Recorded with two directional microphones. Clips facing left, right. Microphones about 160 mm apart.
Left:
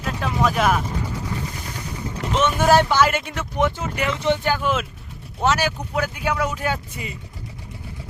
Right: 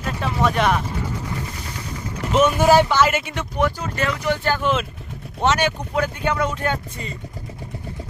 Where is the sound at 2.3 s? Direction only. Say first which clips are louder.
Right 2 dB; 5° right (ahead or behind).